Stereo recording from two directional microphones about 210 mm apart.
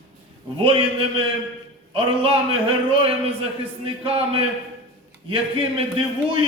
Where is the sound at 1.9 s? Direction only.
25° right (ahead or behind).